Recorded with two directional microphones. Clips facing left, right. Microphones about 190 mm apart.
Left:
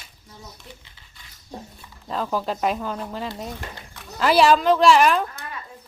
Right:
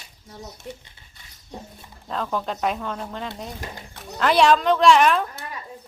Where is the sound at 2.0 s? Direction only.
5° left (ahead or behind).